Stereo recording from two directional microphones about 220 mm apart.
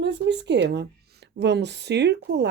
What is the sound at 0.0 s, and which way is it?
A woman's voice, 50° right (ahead or behind).